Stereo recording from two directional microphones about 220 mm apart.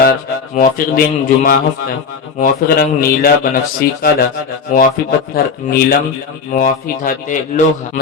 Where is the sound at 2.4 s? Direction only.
40° left (ahead or behind).